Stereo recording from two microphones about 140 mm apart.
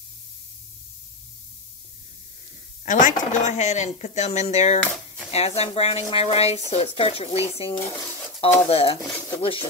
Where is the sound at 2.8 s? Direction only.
60° left (ahead or behind).